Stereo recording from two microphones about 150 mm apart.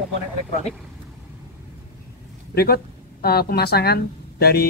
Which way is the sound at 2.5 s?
90° left.